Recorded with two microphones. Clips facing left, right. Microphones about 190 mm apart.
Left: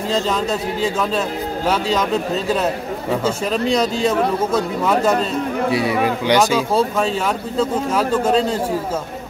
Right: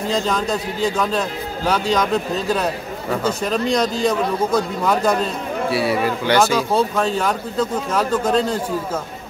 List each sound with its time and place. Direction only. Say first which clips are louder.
0.1 s speech: left 1 dB; 5° left (ahead or behind)
1.7 s speech: right 1 dB; 5° left (ahead or behind)
3.3 s speech: even; 5° left (ahead or behind)
5.7 s speech: right 1 dB; 20° left (ahead or behind)